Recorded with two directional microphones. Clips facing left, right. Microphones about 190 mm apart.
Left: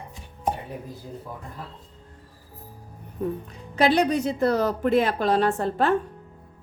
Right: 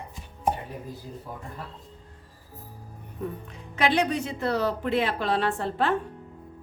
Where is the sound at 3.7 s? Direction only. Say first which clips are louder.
Left 4 dB; 35° left (ahead or behind).